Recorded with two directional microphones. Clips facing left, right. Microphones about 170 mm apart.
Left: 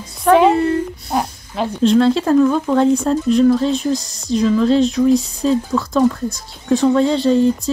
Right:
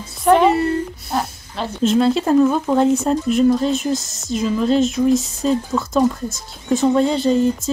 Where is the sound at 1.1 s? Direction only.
10° left (ahead or behind).